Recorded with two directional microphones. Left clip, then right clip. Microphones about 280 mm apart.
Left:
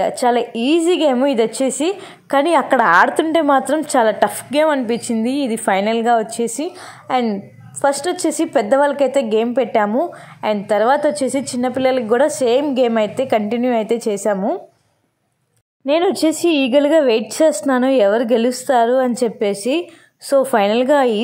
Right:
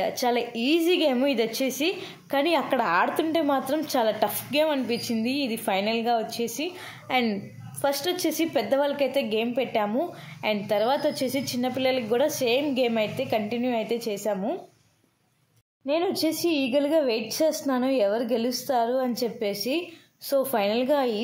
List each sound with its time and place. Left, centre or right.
0.2 s a woman's voice: centre
15.9 s a woman's voice: left